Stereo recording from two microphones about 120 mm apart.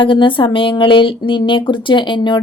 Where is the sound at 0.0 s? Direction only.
45° left (ahead or behind).